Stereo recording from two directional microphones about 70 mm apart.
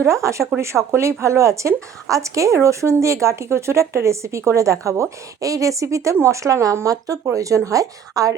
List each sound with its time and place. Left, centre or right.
0.0 s speech: right